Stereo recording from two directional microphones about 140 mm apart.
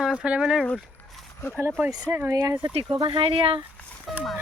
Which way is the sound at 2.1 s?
20° right (ahead or behind).